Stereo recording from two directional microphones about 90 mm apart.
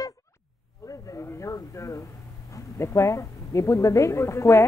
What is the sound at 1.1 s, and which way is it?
Speech, 35° left (ahead or behind).